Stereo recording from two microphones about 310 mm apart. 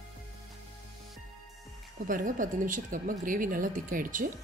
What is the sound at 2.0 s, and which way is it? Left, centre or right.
Speech, right.